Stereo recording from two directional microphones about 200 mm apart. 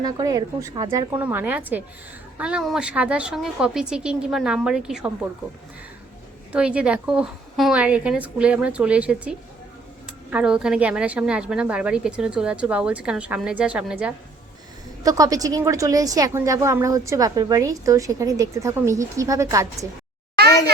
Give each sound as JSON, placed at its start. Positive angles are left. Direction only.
{"t": 0.0, "sound": "a woman's voice", "side_deg": -20}
{"t": 6.5, "sound": "a woman's voice", "side_deg": -5}
{"t": 15.0, "sound": "a woman's voice", "side_deg": -15}